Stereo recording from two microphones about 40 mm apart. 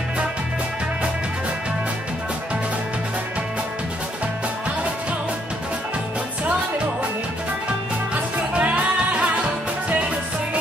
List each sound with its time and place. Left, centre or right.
8.1 s music: right